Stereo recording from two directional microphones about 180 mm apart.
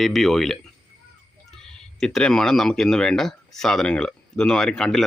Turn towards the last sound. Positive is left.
turn(degrees=0)  # may be behind; listen again after turning